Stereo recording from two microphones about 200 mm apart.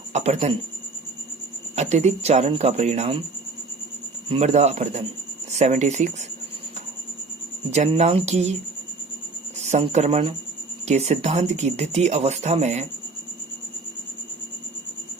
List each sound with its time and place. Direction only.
0.1 s speech: 35° right (ahead or behind)
1.7 s speech: 35° right (ahead or behind)
4.3 s speech: 35° right (ahead or behind)
7.7 s speech: 35° right (ahead or behind)
9.6 s speech: 35° right (ahead or behind)